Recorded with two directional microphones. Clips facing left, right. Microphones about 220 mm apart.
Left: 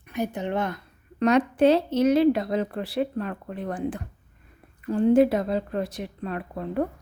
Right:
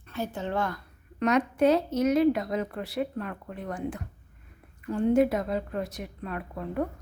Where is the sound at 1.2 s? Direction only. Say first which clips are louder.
Left 4 dB; 30° left (ahead or behind).